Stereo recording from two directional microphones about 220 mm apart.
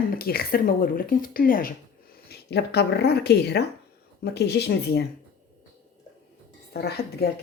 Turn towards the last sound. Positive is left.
turn(degrees=45)  # may be behind; listen again after turning